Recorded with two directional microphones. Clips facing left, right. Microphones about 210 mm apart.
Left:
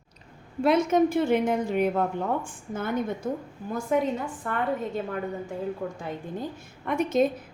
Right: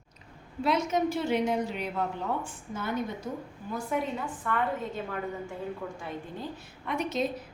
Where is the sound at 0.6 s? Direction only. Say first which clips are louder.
Left 6 dB; 55° left (ahead or behind).